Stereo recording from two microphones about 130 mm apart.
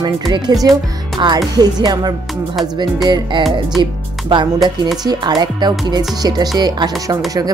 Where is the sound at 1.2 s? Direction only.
30° right (ahead or behind).